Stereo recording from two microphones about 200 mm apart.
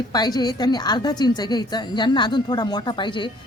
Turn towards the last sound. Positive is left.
turn(degrees=25)  # may be behind; listen again after turning